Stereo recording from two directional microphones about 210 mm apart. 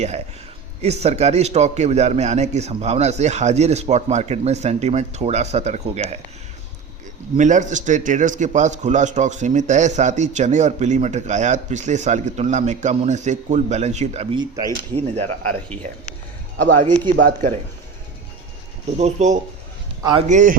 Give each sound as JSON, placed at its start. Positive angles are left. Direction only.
{"t": 0.8, "sound": "speech", "side_deg": -30}
{"t": 7.3, "sound": "speech", "side_deg": -35}
{"t": 16.6, "sound": "speech", "side_deg": -40}
{"t": 18.9, "sound": "speech", "side_deg": -35}
{"t": 20.0, "sound": "a man's voice", "side_deg": -20}
{"t": 20.2, "sound": "speech", "side_deg": -35}